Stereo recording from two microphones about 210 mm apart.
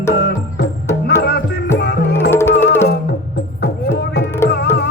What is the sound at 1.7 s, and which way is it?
Music, 55° left (ahead or behind).